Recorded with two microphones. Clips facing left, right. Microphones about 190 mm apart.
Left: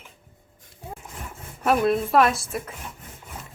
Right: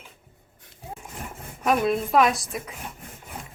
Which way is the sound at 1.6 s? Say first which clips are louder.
Left 2 dB; centre (ahead or behind).